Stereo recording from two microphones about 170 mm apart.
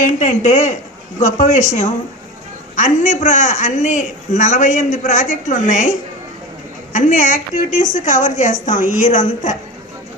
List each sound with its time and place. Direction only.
0.0 s a man's voice: 45° left (ahead or behind)
6.9 s a man's voice: 45° left (ahead or behind)